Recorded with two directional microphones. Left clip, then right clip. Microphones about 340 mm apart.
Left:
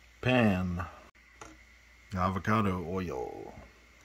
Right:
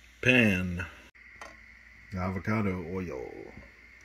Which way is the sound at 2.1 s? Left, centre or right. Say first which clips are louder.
Left 4 dB; centre.